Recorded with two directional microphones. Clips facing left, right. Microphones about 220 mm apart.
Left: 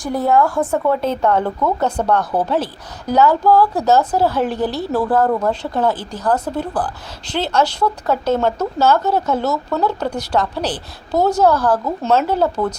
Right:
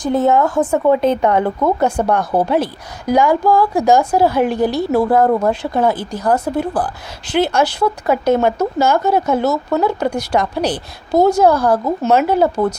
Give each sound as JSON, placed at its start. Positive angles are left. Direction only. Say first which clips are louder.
{"t": 0.0, "sound": "a woman's voice", "louder": "right 2 dB", "side_deg": -20}